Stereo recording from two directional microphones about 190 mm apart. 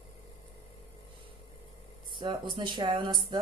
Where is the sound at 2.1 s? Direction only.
25° right (ahead or behind).